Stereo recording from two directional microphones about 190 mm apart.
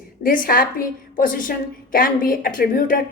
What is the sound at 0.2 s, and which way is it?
A woman's voice, 45° left (ahead or behind).